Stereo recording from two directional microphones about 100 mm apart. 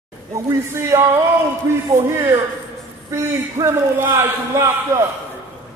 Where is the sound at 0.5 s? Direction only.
30° right (ahead or behind).